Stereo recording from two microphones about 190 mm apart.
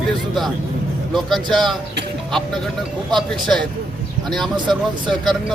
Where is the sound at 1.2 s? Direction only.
Centre (ahead or behind).